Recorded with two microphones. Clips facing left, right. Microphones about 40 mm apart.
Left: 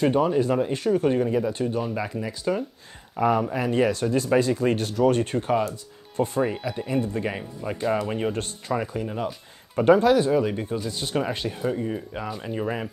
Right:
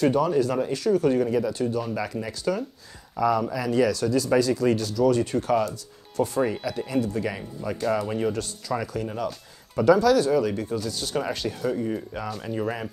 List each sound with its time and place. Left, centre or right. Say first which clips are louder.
0.0 s speech: even; left
2.5 s speech: left 1 dB; centre
3.2 s speech: left 1 dB; left
5.5 s speech: even; left